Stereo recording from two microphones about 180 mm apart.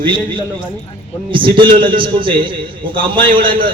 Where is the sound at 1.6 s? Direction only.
30° right (ahead or behind).